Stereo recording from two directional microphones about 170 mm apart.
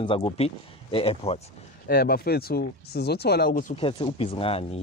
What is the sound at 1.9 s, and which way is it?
Speech, 65° left (ahead or behind).